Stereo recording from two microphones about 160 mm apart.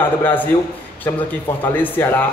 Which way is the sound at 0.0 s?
10° left (ahead or behind).